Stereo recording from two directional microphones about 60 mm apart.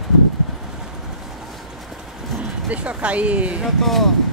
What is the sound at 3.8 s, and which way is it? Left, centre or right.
Speech, centre.